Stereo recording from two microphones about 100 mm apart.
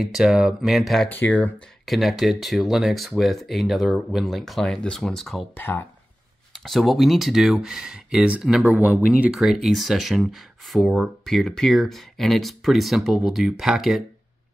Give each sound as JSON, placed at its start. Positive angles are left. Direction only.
{"t": 0.0, "sound": "speech", "side_deg": -5}
{"t": 1.1, "sound": "speech", "side_deg": 15}
{"t": 1.9, "sound": "speech", "side_deg": 0}
{"t": 5.5, "sound": "speech", "side_deg": 20}
{"t": 6.5, "sound": "speech", "side_deg": 0}
{"t": 9.4, "sound": "speech", "side_deg": 0}